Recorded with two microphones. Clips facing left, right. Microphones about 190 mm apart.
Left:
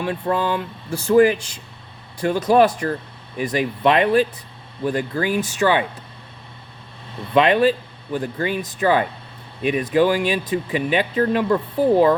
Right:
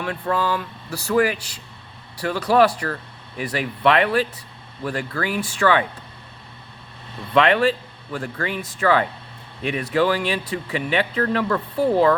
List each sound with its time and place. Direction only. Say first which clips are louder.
0.0 s speech: left 2 dB; 20° left (ahead or behind)
7.3 s speech: left 2 dB; 20° left (ahead or behind)